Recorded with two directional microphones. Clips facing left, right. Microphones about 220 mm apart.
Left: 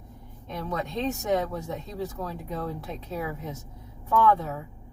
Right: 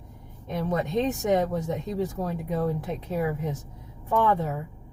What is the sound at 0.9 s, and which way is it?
Speech, 15° right (ahead or behind).